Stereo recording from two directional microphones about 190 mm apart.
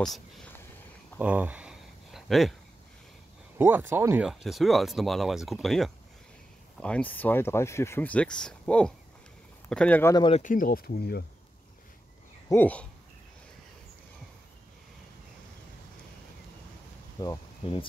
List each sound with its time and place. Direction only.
1.1 s a sound: 5° right (ahead or behind)
3.5 s speech: 10° right (ahead or behind); by 10.1 s 10° left (ahead or behind)
10.1 s speech: 25° left (ahead or behind)
10.4 s speech: 45° left (ahead or behind)
12.4 s a sound: 10° left (ahead or behind)
17.2 s speech: 25° left (ahead or behind)